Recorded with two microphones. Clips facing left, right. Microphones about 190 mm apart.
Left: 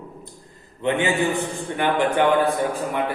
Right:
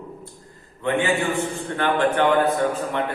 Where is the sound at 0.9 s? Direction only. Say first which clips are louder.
Left 1 dB; 20° left (ahead or behind).